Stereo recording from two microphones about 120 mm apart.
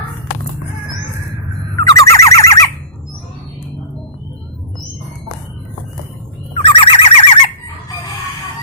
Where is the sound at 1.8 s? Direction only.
25° left (ahead or behind).